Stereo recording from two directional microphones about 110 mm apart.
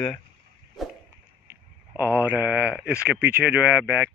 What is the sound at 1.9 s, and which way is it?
Speech, 15° right (ahead or behind).